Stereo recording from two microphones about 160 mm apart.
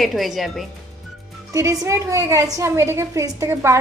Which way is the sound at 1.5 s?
20° right (ahead or behind).